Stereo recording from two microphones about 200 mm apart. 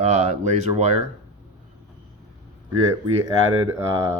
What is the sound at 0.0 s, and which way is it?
Speech, 35° right (ahead or behind).